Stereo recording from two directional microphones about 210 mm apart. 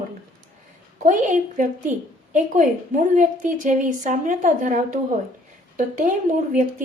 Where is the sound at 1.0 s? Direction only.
35° right (ahead or behind).